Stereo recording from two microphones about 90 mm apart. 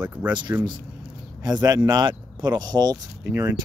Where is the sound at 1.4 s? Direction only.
45° right (ahead or behind).